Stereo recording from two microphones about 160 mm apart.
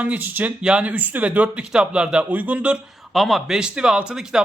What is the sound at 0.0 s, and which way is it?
Speech, 10° right (ahead or behind).